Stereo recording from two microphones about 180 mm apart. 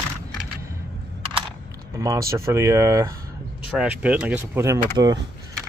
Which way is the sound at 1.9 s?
15° right (ahead or behind).